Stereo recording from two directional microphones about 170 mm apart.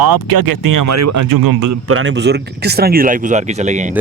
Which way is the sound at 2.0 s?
90° right.